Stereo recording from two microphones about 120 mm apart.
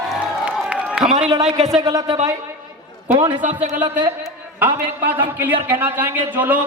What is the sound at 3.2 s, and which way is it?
Speech, 40° right (ahead or behind).